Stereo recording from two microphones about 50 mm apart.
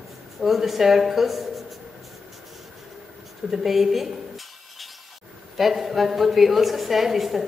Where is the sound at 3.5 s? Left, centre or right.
Centre.